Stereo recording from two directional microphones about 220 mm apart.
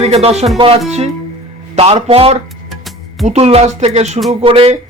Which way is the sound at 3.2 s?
30° right (ahead or behind).